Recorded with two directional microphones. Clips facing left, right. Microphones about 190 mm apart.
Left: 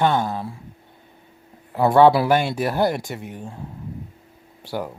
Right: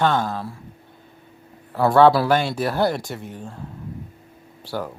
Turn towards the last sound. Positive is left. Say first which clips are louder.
# even
turn(degrees=15)  # may be behind; listen again after turning